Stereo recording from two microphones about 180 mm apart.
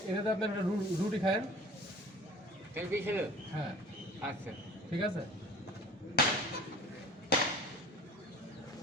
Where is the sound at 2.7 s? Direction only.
10° right (ahead or behind).